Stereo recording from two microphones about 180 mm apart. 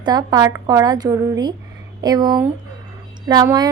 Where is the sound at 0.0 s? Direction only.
25° right (ahead or behind).